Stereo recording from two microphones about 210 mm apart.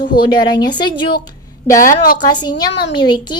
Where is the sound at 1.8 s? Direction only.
40° left (ahead or behind).